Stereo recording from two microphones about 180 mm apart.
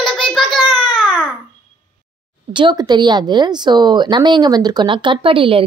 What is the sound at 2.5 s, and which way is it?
A woman's voice, 25° right (ahead or behind).